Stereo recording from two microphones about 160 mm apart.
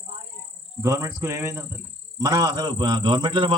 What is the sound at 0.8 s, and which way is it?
A man's voice, 20° right (ahead or behind).